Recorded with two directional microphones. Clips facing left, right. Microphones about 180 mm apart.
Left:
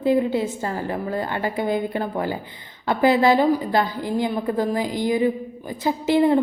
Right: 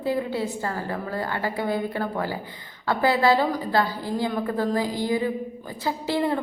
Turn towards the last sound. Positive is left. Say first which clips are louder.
# left 7 dB
turn(degrees=20)  # may be behind; listen again after turning